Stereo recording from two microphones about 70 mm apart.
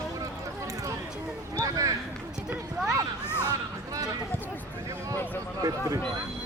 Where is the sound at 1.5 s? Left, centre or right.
Right.